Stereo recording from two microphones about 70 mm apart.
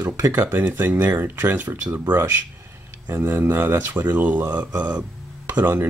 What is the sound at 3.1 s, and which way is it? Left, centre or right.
Speech, right.